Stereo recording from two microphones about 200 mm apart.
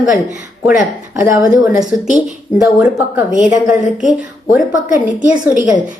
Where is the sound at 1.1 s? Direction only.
15° right (ahead or behind).